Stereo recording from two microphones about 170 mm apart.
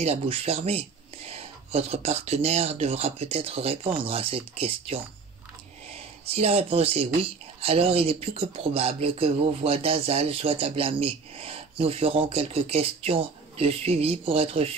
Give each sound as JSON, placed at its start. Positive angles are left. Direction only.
{"t": 0.0, "sound": "speech", "side_deg": -35}
{"t": 6.2, "sound": "speech", "side_deg": -35}